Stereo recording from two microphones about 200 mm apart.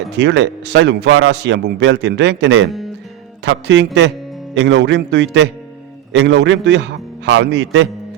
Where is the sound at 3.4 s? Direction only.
60° right (ahead or behind).